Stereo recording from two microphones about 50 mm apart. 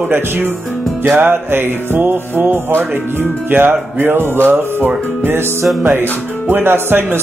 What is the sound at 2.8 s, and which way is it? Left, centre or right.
Speech, right.